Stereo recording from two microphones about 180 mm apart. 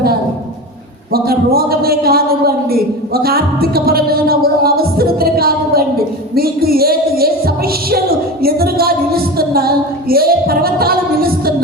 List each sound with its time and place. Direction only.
1.1 s speech: 60° right (ahead or behind)